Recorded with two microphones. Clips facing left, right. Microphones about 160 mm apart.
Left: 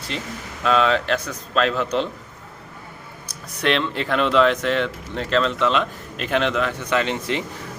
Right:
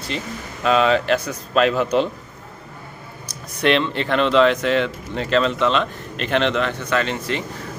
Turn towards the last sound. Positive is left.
turn(degrees=15)  # may be behind; listen again after turning